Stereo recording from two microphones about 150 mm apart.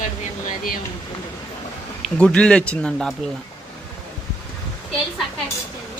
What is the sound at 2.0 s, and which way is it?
Speech, 5° left (ahead or behind).